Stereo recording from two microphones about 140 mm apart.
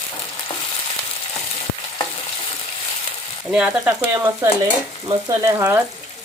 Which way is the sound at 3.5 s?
10° right (ahead or behind).